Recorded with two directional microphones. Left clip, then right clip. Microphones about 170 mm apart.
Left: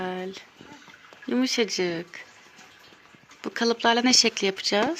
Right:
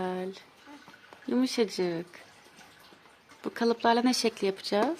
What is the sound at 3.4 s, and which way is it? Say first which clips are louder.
Speech: left 3 dB; 5° right (ahead or behind).